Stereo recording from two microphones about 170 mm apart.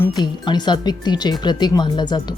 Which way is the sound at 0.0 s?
25° left (ahead or behind).